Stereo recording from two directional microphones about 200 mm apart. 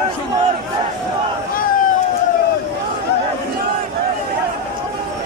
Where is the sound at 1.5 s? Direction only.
45° left (ahead or behind).